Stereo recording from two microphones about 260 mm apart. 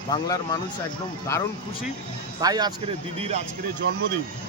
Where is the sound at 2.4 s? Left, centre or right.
Centre.